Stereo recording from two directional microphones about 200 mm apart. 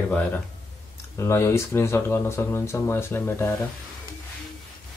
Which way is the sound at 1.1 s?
15° left (ahead or behind).